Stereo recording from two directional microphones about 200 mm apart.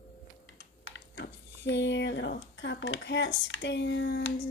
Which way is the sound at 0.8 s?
65° left (ahead or behind).